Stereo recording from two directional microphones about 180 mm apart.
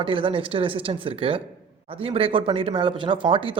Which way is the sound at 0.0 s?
30° right (ahead or behind).